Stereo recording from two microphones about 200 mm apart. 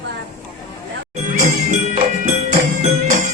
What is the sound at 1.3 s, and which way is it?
Jingle bell, 40° right (ahead or behind).